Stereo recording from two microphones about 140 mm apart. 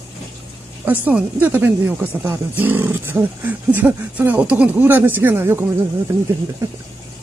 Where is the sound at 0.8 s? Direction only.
10° right (ahead or behind).